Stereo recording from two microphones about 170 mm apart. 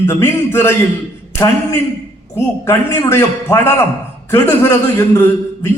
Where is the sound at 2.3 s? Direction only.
15° left (ahead or behind).